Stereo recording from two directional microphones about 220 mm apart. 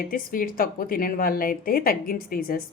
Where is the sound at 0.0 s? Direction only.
40° left (ahead or behind).